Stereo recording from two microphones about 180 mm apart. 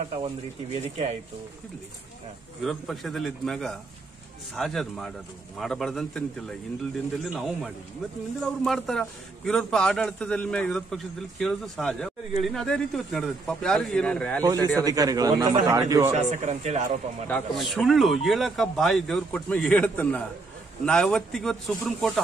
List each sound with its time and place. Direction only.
0.7 s speech: 35° right (ahead or behind)
2.6 s a man's voice: centre (ahead or behind)
7.2 s a man's voice: centre (ahead or behind)
14.4 s a man's voice: 20° right (ahead or behind)
16.1 s speech: 40° right (ahead or behind)
17.3 s a man's voice: centre (ahead or behind)